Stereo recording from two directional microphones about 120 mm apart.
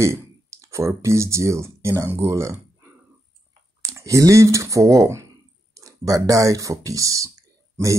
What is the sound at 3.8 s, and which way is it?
Speech, 25° right (ahead or behind).